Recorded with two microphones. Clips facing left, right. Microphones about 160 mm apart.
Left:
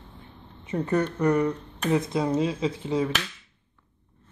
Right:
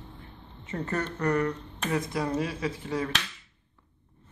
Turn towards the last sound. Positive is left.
turn(degrees=20)  # may be behind; listen again after turning